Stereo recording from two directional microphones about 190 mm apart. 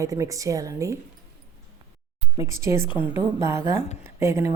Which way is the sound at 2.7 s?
25° left (ahead or behind).